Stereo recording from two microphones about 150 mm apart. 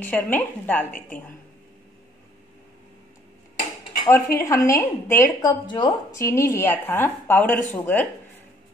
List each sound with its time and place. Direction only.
0.0 s speech: 10° left (ahead or behind)
4.1 s a woman's voice: 20° left (ahead or behind)
6.1 s speech: 20° left (ahead or behind)